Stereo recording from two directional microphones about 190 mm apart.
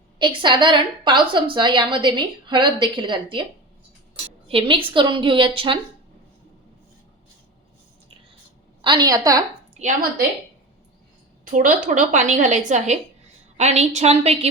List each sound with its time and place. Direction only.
0.2 s a woman's voice: 25° right (ahead or behind)
8.8 s a woman's voice: 25° right (ahead or behind)
9.7 s a woman's voice: 40° right (ahead or behind)
11.5 s a woman's voice: 45° right (ahead or behind)